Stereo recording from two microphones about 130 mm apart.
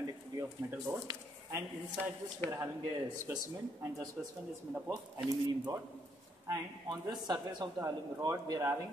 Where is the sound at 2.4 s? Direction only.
15° left (ahead or behind).